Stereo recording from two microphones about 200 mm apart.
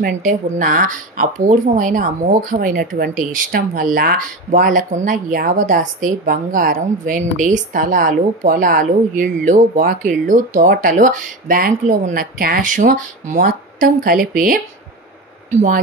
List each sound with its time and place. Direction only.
0.0 s a woman's voice: 40° right (ahead or behind)